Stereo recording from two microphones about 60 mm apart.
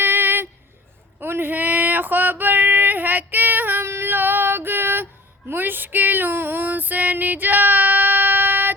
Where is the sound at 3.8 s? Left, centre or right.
Right.